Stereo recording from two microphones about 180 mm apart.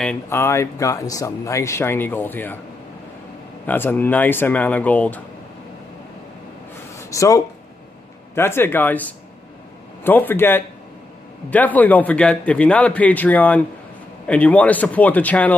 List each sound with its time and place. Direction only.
0.0 s speech: 10° left (ahead or behind)
3.6 s speech: 10° left (ahead or behind)
7.0 s speech: 15° left (ahead or behind)